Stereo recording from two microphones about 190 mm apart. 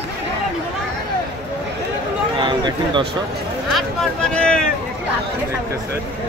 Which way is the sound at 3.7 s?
Centre (ahead or behind).